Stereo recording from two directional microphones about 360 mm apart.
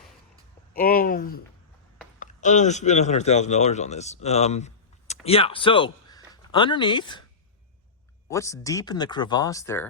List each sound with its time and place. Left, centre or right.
0.7 s speech: left
8.3 s speech: centre